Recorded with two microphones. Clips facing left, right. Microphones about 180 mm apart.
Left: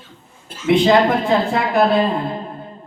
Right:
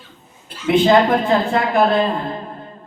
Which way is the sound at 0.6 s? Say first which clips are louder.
Even; centre (ahead or behind).